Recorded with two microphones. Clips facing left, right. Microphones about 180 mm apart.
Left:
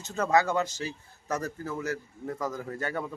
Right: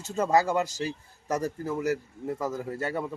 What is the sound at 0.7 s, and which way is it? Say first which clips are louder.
Speech: right 4 dB; 35° right (ahead or behind).